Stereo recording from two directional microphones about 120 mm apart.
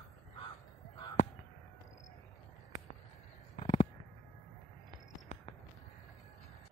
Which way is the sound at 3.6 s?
50° left (ahead or behind).